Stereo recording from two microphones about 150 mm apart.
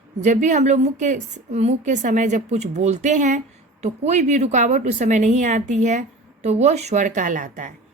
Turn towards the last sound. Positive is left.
turn(degrees=-60)  # may be behind; listen again after turning